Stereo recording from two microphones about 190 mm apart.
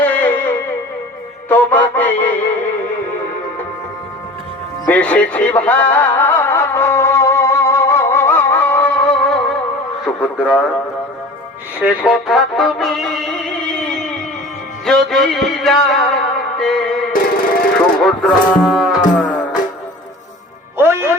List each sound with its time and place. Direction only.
0.0 s music: 10° left (ahead or behind)
4.9 s music: 5° left (ahead or behind)
11.9 s music: 5° right (ahead or behind)
17.2 s a sound: 50° left (ahead or behind)
18.0 s moo: centre (ahead or behind)
20.7 s music: 15° right (ahead or behind)